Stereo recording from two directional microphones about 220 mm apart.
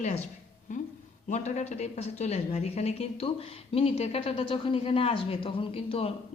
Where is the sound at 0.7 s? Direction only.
35° left (ahead or behind).